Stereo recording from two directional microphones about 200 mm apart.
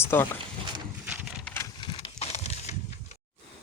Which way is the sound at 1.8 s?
25° left (ahead or behind).